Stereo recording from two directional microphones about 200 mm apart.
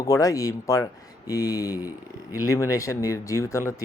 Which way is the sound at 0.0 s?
15° left (ahead or behind).